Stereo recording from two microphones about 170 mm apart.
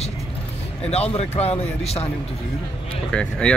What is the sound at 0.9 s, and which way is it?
Speech, 40° left (ahead or behind).